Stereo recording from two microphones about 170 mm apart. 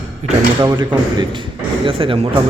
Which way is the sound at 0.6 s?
25° right (ahead or behind).